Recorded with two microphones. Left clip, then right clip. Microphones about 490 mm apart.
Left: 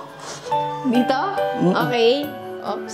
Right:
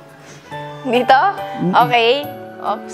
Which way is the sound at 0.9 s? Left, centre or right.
Right.